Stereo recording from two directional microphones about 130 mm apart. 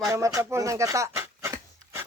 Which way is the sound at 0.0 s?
25° right (ahead or behind).